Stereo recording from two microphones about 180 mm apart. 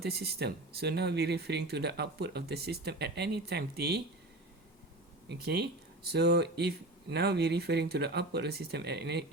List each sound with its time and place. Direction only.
0.0 s speech: 60° right (ahead or behind)
5.3 s speech: 65° right (ahead or behind)